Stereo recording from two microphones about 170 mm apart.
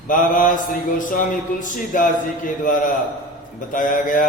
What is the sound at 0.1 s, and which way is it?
Mantra, 50° left (ahead or behind).